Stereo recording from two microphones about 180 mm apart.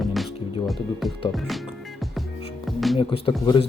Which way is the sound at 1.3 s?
Centre (ahead or behind).